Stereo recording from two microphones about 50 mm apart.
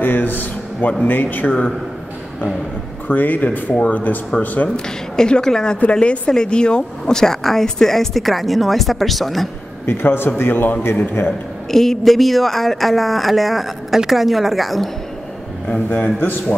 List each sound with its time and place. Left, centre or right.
0.0 s a man's voice: left
3.1 s speech: left
4.7 s speech: centre
9.8 s a man's voice: left
11.2 s a man's voice: left
11.7 s speech: centre
15.9 s speech: left